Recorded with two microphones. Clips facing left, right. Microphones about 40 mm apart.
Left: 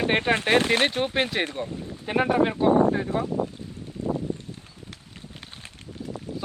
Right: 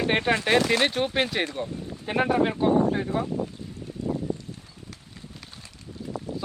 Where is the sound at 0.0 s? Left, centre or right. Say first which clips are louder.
Left 1 dB; left.